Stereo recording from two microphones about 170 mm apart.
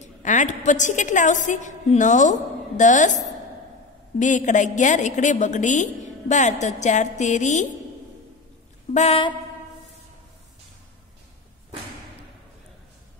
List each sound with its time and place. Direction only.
0.0 s a sound: 45° left (ahead or behind)
0.7 s a woman's voice: 45° left (ahead or behind)
4.2 s a woman's voice: 45° left (ahead or behind)
8.9 s mantra: 40° left (ahead or behind)